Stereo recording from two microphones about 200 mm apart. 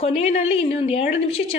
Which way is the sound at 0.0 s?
30° left (ahead or behind).